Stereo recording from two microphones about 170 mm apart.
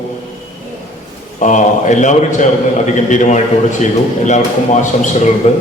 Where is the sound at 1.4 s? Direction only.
45° left (ahead or behind).